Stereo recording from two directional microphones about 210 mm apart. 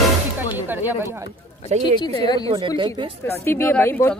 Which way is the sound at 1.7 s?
30° right (ahead or behind).